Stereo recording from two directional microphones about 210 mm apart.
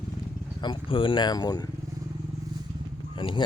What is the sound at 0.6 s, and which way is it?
Speech, 25° left (ahead or behind).